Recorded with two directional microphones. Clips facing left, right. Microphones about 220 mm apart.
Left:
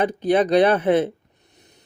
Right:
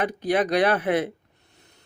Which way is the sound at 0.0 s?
25° left (ahead or behind).